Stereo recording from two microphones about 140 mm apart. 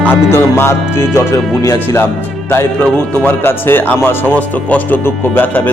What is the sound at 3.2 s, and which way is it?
Speech, 15° left (ahead or behind).